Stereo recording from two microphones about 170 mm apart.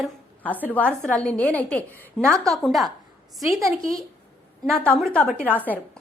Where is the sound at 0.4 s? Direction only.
10° left (ahead or behind).